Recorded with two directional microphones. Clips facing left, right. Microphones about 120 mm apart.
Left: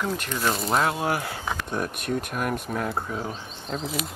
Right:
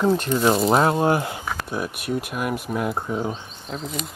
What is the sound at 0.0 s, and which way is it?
Speech, 30° right (ahead or behind).